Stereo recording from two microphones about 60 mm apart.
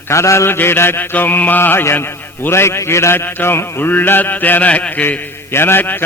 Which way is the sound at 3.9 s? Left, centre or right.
Left.